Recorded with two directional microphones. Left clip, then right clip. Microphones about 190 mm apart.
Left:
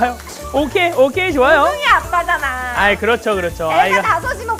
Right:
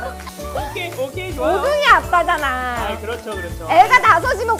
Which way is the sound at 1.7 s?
35° right (ahead or behind).